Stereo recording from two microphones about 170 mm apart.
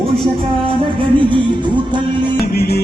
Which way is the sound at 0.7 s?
30° right (ahead or behind).